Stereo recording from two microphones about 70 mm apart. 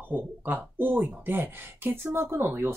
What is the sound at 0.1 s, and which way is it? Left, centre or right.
Speech, right.